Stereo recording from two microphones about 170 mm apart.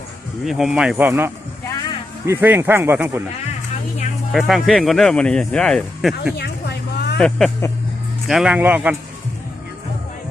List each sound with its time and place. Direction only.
0.4 s speech: 5° right (ahead or behind)
4.3 s speech: centre (ahead or behind)
6.3 s vehicle: 75° left (ahead or behind)
7.2 s speech: 5° left (ahead or behind)